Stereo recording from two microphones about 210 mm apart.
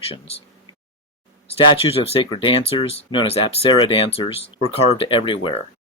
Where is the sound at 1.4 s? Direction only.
25° left (ahead or behind).